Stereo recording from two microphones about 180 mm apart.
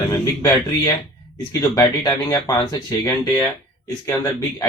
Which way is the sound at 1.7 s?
20° left (ahead or behind).